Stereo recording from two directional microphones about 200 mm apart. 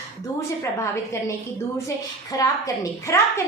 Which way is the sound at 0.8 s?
15° left (ahead or behind).